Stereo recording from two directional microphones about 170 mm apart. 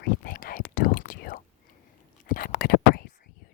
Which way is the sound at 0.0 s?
55° left (ahead or behind).